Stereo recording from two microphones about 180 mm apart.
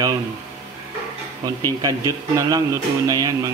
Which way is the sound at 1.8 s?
20° right (ahead or behind).